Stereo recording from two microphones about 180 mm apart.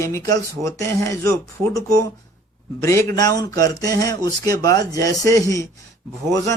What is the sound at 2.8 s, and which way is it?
Speech, 15° left (ahead or behind).